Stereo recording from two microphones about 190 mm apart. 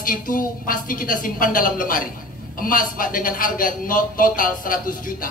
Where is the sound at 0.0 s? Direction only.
45° left (ahead or behind).